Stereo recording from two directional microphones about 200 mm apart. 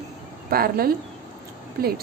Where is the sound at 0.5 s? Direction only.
50° right (ahead or behind).